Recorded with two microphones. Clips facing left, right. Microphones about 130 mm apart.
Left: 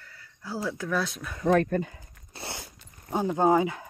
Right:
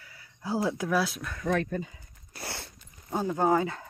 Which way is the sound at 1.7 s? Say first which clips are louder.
Left 5 dB; 65° left (ahead or behind).